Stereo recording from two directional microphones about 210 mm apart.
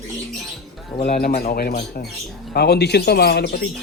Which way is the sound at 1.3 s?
45° left (ahead or behind).